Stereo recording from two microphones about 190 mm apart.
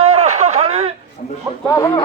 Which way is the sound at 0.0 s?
35° right (ahead or behind).